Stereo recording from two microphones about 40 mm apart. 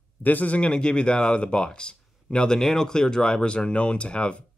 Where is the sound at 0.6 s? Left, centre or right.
Left.